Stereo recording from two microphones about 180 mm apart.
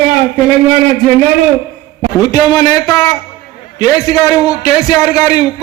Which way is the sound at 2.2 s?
20° left (ahead or behind).